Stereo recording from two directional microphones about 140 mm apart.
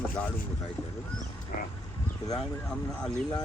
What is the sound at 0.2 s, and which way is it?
Speech, 10° left (ahead or behind).